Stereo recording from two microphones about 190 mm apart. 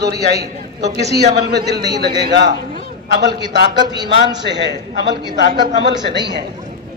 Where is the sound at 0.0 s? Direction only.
55° right (ahead or behind).